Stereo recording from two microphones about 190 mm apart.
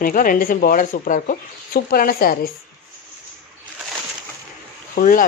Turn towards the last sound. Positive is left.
turn(degrees=45)  # may be behind; listen again after turning